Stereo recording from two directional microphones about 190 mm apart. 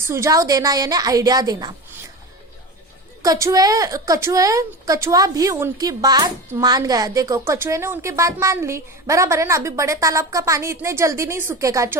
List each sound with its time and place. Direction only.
0.0 s a woman's voice: 15° right (ahead or behind)
3.2 s a woman's voice: 15° right (ahead or behind)